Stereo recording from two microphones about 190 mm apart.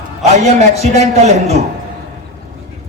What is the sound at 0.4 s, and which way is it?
A man's voice, 35° right (ahead or behind).